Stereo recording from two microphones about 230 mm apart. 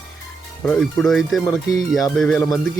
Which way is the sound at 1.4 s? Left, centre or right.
Centre.